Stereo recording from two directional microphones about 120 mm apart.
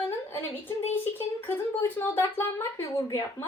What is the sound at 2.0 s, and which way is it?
A woman's voice, 20° left (ahead or behind).